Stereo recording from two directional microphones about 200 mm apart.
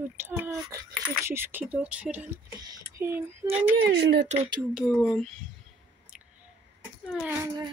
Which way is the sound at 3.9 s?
55° right (ahead or behind).